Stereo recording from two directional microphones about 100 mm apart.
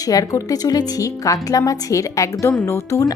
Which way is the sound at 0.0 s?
35° left (ahead or behind).